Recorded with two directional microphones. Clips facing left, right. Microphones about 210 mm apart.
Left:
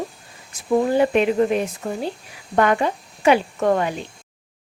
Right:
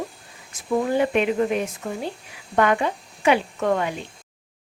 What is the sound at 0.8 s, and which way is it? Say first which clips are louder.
Speech: left 3 dB; 35° left (ahead or behind).